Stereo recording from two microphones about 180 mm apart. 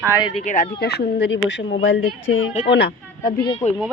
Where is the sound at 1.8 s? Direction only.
90° left; by 3.3 s 70° left (ahead or behind).